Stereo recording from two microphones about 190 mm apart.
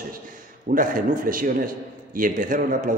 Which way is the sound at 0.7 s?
45° right (ahead or behind).